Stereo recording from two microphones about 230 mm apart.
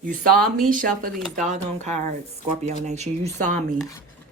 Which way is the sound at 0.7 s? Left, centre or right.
Right.